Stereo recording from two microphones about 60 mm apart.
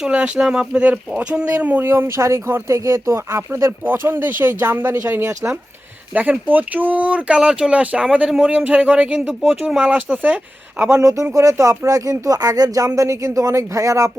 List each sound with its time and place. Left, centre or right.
0.0 s speech: centre
1.8 s speech: right
2.1 s speech: right
3.8 s speech: right
5.3 s speech: right
6.1 s speech: right
10.1 s speech: right
10.8 s speech: right
11.9 s speech: right
12.3 s speech: right